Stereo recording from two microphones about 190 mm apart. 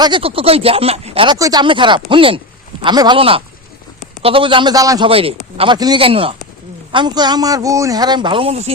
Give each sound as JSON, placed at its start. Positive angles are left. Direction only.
{"t": 0.0, "sound": "speech", "side_deg": -25}
{"t": 5.0, "sound": "speech", "side_deg": -30}